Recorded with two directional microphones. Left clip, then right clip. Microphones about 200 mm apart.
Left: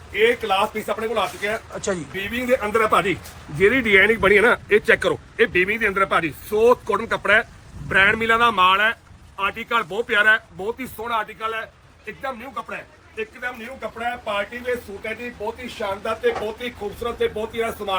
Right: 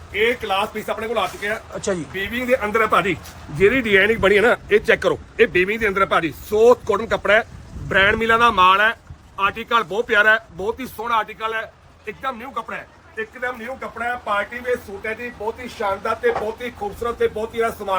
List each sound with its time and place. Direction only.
0.1 s speech: centre (ahead or behind)
1.8 s speech: 10° right (ahead or behind)
14.0 s speech: 5° right (ahead or behind)
15.6 s speech: 10° right (ahead or behind)